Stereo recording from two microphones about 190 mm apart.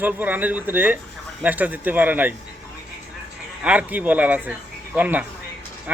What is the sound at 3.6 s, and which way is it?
Speech, 5° right (ahead or behind).